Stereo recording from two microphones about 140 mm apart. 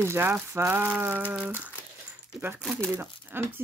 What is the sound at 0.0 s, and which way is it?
Speech, 15° right (ahead or behind).